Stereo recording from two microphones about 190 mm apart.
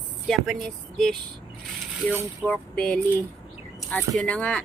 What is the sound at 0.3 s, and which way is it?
Speech, centre (ahead or behind).